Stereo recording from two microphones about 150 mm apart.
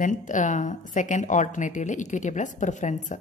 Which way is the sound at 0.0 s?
55° left (ahead or behind).